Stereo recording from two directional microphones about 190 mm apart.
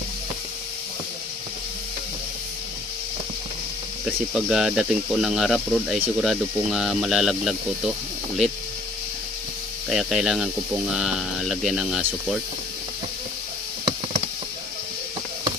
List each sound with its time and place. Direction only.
4.0 s speech: centre (ahead or behind)
9.8 s speech: centre (ahead or behind)